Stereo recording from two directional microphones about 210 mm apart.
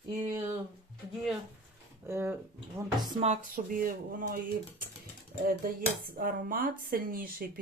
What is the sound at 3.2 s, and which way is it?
Speech, 35° right (ahead or behind).